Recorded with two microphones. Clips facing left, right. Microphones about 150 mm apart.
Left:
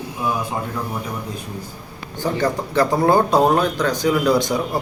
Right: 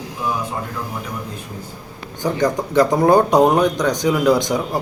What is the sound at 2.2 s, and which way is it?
Speech, 15° right (ahead or behind).